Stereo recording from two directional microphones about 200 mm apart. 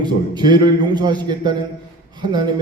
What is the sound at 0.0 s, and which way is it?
A man's voice, 20° right (ahead or behind).